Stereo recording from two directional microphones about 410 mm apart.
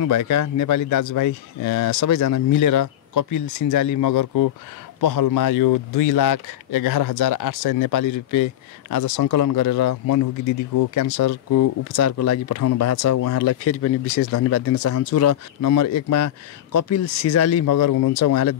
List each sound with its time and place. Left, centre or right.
0.0 s speech: left